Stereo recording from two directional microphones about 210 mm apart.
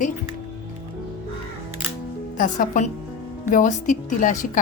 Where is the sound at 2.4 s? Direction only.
40° left (ahead or behind).